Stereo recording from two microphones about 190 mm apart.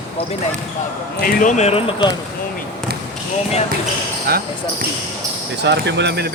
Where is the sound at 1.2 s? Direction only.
40° left (ahead or behind); by 2.1 s 25° left (ahead or behind).